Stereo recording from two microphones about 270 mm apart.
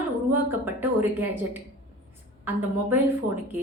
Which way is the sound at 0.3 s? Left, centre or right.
Centre.